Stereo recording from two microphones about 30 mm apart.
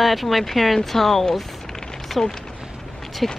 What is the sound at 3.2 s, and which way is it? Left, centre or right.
Speech, centre.